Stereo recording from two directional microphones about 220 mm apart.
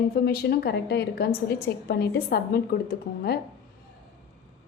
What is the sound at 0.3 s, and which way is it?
A woman's voice, 45° left (ahead or behind).